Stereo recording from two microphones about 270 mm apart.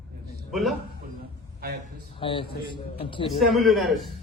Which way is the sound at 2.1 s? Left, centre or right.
Centre.